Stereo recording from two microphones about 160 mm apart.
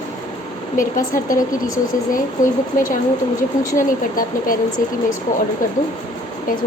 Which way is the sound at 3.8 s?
60° left (ahead or behind).